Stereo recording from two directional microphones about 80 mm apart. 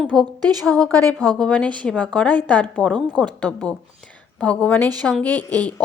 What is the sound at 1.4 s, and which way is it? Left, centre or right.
A woman's voice, centre.